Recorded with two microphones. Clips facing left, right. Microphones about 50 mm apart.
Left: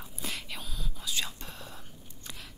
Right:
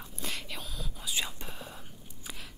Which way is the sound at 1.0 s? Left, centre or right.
Centre.